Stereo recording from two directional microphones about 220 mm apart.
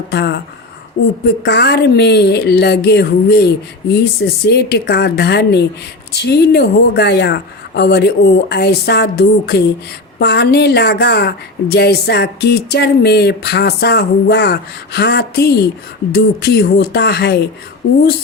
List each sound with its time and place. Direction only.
0.1 s a woman's voice: 50° left (ahead or behind)